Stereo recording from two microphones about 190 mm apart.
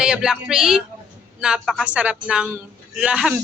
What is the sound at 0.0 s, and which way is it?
A man's voice, 5° right (ahead or behind).